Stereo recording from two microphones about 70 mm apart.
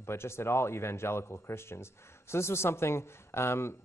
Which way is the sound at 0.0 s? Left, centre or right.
Left.